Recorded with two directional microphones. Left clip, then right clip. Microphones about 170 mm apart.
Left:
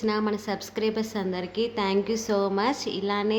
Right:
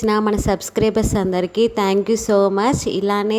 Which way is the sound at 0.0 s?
50° right (ahead or behind).